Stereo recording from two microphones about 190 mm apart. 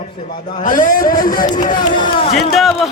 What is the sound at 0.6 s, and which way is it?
Speech, 45° left (ahead or behind).